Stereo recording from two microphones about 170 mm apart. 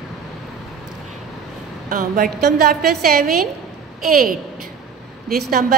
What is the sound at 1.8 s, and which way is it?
A woman's voice, 55° right (ahead or behind).